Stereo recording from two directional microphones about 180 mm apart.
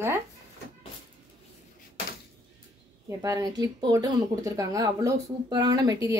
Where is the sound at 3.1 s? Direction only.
20° right (ahead or behind).